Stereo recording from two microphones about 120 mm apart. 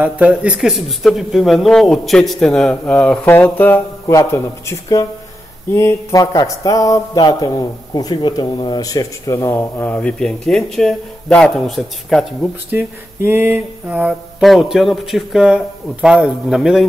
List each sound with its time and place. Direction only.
0.0 s speech: 10° right (ahead or behind); by 3.8 s 15° left (ahead or behind)
4.1 s speech: 25° left (ahead or behind); by 12.3 s centre (ahead or behind)
12.7 s a sound: 20° right (ahead or behind)
14.4 s speech: centre (ahead or behind)